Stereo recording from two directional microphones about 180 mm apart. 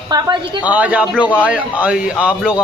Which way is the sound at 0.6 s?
10° right (ahead or behind).